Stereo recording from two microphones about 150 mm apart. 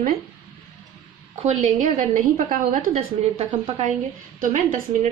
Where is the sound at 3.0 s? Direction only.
40° right (ahead or behind).